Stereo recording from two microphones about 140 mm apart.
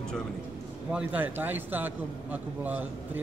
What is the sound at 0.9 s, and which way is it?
A man's voice, 10° right (ahead or behind).